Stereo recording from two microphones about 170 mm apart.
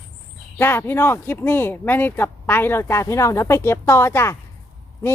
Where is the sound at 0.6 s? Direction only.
15° left (ahead or behind).